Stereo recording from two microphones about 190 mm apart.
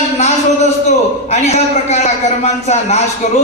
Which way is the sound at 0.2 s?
35° left (ahead or behind).